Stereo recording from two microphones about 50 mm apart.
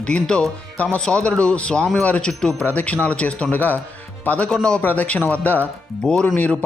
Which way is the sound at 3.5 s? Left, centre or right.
Left.